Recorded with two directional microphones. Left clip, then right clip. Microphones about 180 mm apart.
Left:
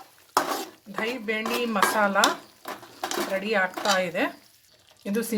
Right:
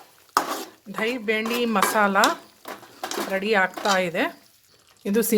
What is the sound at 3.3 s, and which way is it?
Speech, 45° right (ahead or behind).